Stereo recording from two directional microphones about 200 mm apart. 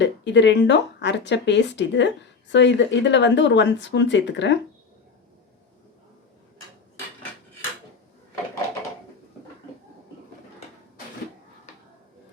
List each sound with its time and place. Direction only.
0.0 s speech: 60° left (ahead or behind)